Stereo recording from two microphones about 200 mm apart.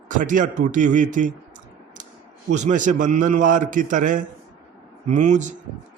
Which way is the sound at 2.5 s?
40° right (ahead or behind).